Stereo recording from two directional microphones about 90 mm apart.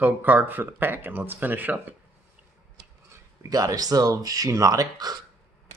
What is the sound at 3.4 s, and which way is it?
Speech, 40° right (ahead or behind).